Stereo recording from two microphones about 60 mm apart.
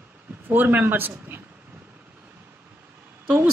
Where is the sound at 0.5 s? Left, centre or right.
Right.